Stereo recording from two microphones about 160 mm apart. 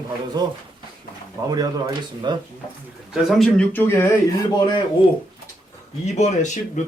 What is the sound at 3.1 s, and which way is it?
Speech, centre (ahead or behind).